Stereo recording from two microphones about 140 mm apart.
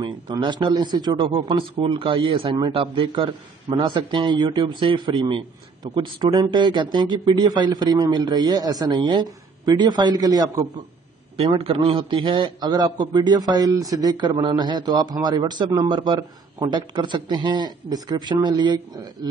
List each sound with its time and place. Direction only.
0.0 s speech: 35° right (ahead or behind)
11.3 s speech: 40° right (ahead or behind)